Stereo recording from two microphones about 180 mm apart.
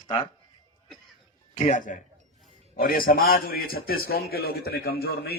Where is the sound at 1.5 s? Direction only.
40° left (ahead or behind).